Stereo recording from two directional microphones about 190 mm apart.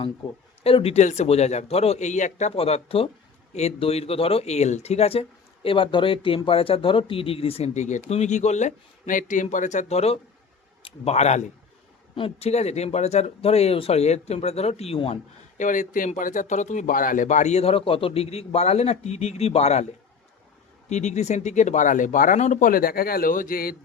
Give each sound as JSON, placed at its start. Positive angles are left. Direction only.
{"t": 0.6, "sound": "speech", "side_deg": 30}
{"t": 15.5, "sound": "speech", "side_deg": 40}
{"t": 20.9, "sound": "speech", "side_deg": 35}